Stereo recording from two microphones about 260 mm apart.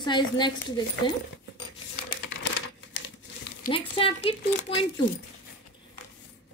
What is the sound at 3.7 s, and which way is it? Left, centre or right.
A woman's voice, centre.